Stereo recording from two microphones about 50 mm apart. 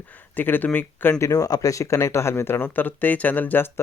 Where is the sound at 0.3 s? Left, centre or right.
Left.